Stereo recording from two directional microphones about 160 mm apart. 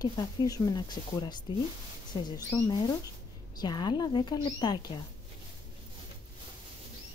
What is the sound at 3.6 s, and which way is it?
Speech, 25° left (ahead or behind).